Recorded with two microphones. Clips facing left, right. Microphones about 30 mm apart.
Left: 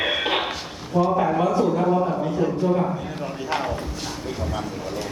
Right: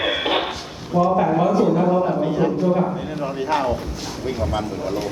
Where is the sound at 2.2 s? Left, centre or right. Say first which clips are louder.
Right 3 dB; right.